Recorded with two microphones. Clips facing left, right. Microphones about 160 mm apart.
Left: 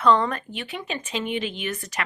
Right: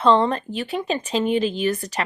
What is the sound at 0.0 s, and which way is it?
Speech, 30° right (ahead or behind).